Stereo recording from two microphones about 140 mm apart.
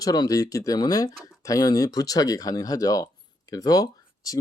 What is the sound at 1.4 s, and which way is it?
Speech, 25° left (ahead or behind).